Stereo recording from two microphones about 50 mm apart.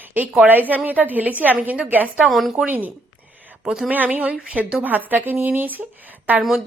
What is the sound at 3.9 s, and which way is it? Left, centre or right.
A woman's voice, right.